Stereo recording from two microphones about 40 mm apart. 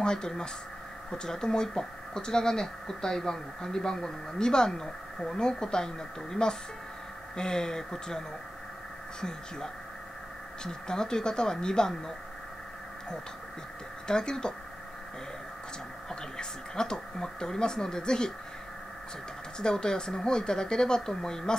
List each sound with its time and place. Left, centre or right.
0.0 s speech: centre
10.6 s speech: centre
14.0 s speech: centre
16.1 s speech: centre
19.6 s speech: centre